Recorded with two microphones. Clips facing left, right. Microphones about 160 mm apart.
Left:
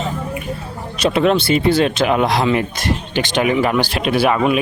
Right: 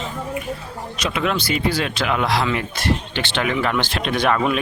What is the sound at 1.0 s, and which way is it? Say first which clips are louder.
Speech: left 8 dB; 30° left (ahead or behind).